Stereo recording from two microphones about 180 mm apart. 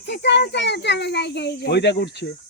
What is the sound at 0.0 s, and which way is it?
A child's voice, 75° left (ahead or behind).